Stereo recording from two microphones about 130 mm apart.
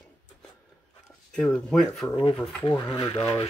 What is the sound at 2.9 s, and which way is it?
Speech, 40° left (ahead or behind).